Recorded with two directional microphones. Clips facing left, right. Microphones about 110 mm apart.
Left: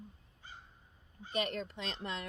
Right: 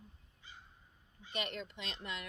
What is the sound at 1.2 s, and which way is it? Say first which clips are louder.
Speech: left 5 dB; 40° left (ahead or behind).